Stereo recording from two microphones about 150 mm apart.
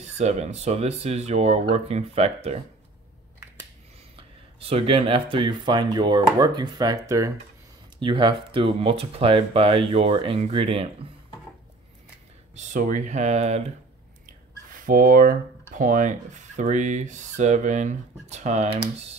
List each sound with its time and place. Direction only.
0.0 s speech: 45° right (ahead or behind)
4.2 s speech: 40° right (ahead or behind); by 7.3 s 20° right (ahead or behind)
8.0 s speech: 35° right (ahead or behind)
12.5 s speech: 55° right (ahead or behind)
14.2 s speech: 65° right (ahead or behind); by 18.7 s 50° right (ahead or behind)